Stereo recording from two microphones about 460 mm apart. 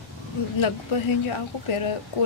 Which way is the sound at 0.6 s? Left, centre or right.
Left.